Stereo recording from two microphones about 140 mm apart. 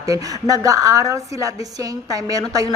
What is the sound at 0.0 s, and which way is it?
A woman's voice, 25° right (ahead or behind).